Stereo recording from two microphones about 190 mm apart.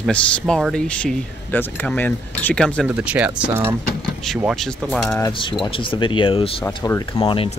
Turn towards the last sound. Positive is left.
turn(degrees=30)  # may be behind; listen again after turning